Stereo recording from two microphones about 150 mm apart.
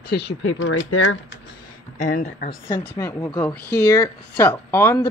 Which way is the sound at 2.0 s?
65° left (ahead or behind).